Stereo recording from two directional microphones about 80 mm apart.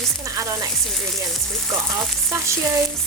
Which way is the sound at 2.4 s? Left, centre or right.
Right.